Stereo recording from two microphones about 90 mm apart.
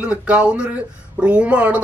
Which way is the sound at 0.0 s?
15° right (ahead or behind).